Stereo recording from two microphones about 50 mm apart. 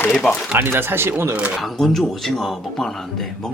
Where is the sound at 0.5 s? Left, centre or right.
Right.